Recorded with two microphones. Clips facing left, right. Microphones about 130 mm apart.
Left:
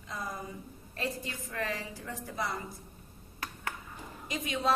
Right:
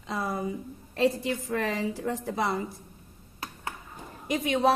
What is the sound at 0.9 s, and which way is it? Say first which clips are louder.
A woman's voice: right 12 dB; 90° right.